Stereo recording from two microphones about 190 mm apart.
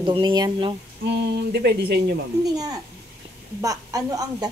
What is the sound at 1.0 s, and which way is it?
Speech, 60° right (ahead or behind).